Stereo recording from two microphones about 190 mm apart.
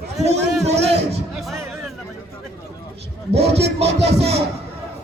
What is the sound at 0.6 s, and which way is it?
Speech, 35° right (ahead or behind).